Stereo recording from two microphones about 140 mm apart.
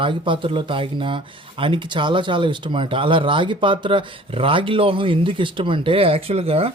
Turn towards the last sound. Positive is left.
turn(degrees=-45)  # may be behind; listen again after turning